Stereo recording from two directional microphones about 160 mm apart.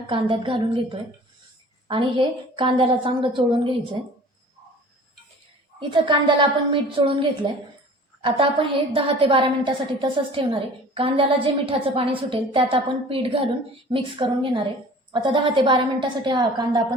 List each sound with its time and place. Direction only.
0.1 s a woman's voice: 30° right (ahead or behind)
5.8 s a woman's voice: 30° right (ahead or behind)